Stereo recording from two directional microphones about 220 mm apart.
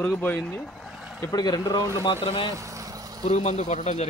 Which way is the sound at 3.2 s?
30° left (ahead or behind).